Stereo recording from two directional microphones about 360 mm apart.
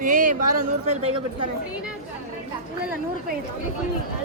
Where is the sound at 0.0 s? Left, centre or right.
Right.